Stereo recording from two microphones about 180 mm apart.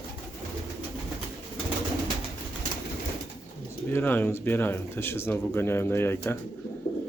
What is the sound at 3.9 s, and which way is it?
Speech, 10° left (ahead or behind).